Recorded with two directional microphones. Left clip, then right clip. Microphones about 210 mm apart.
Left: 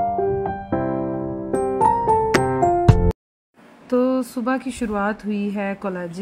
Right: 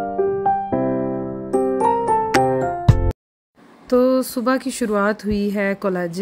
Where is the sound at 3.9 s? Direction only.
15° right (ahead or behind).